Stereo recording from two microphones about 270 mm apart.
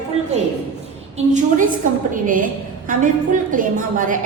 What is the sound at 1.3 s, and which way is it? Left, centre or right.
A woman's voice, right.